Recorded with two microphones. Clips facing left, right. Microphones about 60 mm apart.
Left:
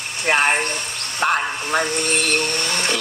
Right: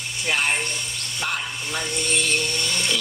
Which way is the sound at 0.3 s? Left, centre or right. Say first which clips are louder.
Left 6 dB; left.